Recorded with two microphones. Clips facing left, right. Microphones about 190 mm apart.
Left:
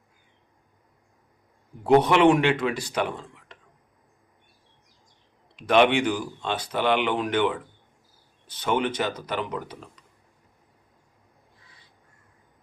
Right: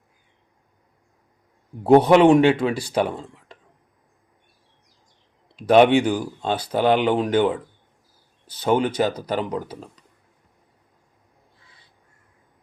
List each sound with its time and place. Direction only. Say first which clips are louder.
1.8 s speech: right 5 dB; 30° right (ahead or behind)
5.5 s speech: right 5 dB; 40° right (ahead or behind)